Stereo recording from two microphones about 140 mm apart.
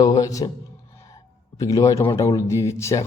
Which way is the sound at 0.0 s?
25° left (ahead or behind).